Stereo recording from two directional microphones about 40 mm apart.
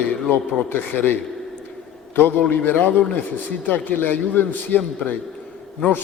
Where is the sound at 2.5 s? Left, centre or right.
Left.